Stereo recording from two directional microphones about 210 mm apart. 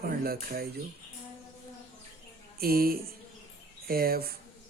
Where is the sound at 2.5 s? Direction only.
45° right (ahead or behind).